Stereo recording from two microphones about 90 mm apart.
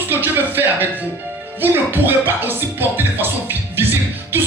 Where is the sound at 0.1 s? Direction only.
20° right (ahead or behind).